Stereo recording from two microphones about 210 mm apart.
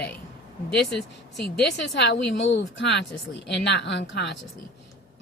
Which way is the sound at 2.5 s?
55° left (ahead or behind).